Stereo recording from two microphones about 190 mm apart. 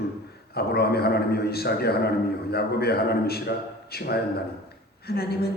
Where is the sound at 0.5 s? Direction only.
55° left (ahead or behind).